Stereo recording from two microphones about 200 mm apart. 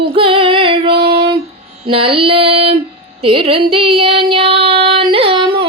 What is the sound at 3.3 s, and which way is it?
Child singing, 25° right (ahead or behind).